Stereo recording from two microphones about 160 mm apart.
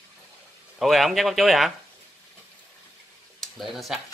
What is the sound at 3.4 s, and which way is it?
Speech, centre (ahead or behind).